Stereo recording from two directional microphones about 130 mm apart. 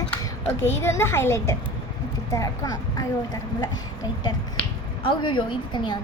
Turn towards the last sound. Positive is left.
turn(degrees=35)  # may be behind; listen again after turning